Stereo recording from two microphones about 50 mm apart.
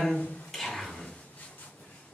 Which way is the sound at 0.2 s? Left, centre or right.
Left.